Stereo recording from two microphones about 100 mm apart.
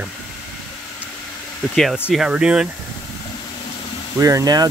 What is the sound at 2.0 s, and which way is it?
Speech, 10° right (ahead or behind).